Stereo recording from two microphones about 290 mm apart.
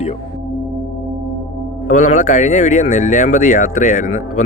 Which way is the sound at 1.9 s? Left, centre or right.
Left.